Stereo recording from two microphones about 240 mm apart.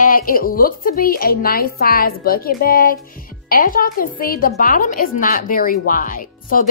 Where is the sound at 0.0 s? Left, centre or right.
Left.